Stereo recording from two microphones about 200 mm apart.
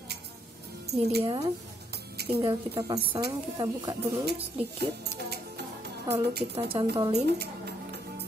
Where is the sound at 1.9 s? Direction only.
55° right (ahead or behind).